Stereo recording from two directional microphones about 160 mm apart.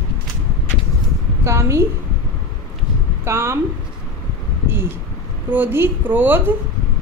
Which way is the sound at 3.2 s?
15° right (ahead or behind).